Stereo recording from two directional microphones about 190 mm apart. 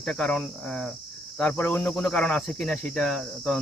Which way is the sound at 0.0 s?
5° left (ahead or behind).